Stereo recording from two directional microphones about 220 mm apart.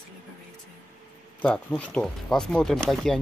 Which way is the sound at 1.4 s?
5° left (ahead or behind).